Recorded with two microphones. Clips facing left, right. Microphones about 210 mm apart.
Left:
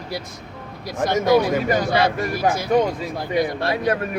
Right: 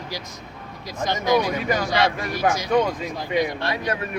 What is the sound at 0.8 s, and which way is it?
Speech, 60° left (ahead or behind).